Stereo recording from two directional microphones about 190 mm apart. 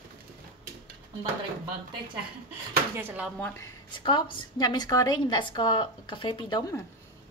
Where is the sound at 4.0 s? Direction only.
25° left (ahead or behind).